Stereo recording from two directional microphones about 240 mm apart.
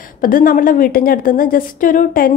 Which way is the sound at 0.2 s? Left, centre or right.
Left.